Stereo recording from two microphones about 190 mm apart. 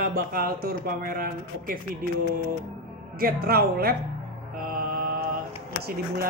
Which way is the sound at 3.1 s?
50° right (ahead or behind).